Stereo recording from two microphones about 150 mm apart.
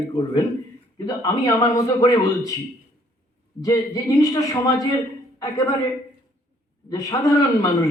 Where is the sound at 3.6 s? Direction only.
25° left (ahead or behind).